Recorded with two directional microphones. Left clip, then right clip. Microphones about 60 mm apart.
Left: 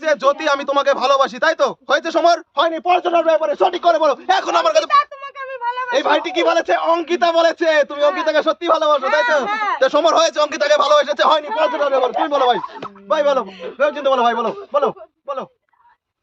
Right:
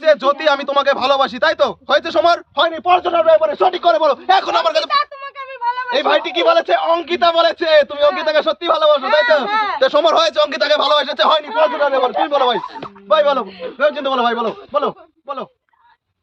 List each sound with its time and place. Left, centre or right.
0.1 s a man's voice: left
3.8 s a man's voice: left
4.9 s a sound: left
6.0 s a man's voice: centre
8.3 s a man's voice: left
13.8 s a man's voice: left